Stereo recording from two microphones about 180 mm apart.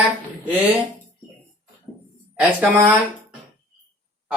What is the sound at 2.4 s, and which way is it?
Speech, 10° right (ahead or behind).